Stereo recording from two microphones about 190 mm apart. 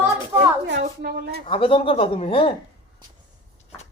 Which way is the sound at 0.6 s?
60° right (ahead or behind).